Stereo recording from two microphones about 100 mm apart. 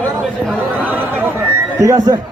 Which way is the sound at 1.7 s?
30° right (ahead or behind).